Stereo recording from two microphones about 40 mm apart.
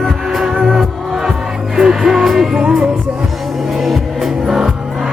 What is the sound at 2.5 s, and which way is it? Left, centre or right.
Music, right.